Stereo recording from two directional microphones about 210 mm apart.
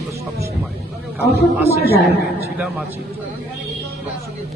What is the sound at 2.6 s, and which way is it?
Speech, 5° right (ahead or behind).